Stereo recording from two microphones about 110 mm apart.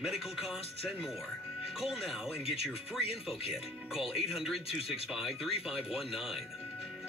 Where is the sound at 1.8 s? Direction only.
5° right (ahead or behind).